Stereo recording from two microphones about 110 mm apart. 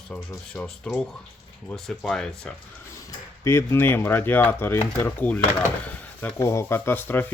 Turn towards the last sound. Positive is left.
turn(degrees=15)  # may be behind; listen again after turning